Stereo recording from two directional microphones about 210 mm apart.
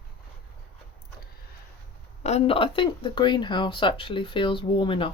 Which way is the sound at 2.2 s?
30° left (ahead or behind).